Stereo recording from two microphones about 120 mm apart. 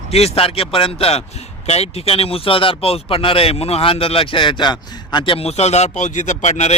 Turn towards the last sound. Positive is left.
turn(degrees=75)  # may be behind; listen again after turning